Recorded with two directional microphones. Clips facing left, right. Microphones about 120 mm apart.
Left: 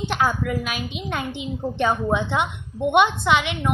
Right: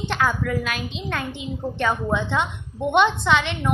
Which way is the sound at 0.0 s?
10° left (ahead or behind).